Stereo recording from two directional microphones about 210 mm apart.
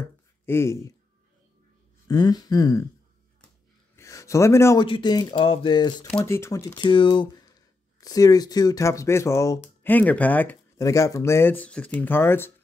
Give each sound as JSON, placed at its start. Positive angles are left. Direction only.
{"t": 0.5, "sound": "speech", "side_deg": 10}
{"t": 2.0, "sound": "speech", "side_deg": 20}
{"t": 3.9, "sound": "a sound", "side_deg": 15}
{"t": 4.8, "sound": "speech", "side_deg": 20}
{"t": 6.0, "sound": "speech", "side_deg": 10}